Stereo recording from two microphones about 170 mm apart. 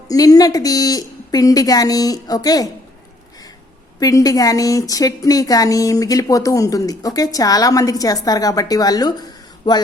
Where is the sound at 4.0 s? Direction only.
20° left (ahead or behind).